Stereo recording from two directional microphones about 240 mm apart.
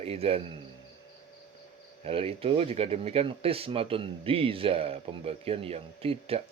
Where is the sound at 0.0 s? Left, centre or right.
Right.